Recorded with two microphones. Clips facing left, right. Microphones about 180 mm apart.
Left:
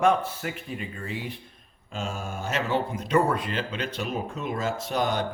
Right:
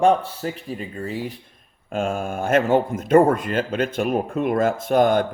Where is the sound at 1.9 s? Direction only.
55° right (ahead or behind).